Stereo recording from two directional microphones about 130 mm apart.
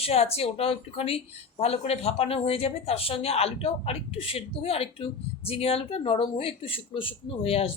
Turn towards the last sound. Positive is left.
turn(degrees=50)  # may be behind; listen again after turning